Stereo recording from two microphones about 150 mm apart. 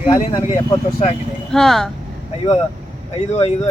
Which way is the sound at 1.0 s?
45° left (ahead or behind).